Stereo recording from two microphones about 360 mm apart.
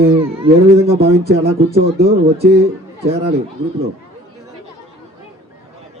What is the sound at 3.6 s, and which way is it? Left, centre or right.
Speech, centre.